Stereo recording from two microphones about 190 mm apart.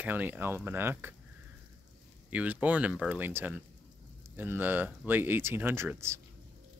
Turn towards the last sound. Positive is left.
turn(degrees=-15)  # may be behind; listen again after turning